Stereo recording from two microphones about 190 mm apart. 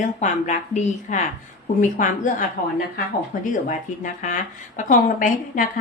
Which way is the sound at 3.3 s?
45° left (ahead or behind).